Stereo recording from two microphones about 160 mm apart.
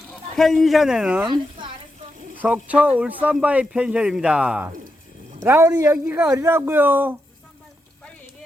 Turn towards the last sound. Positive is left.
turn(degrees=-10)  # may be behind; listen again after turning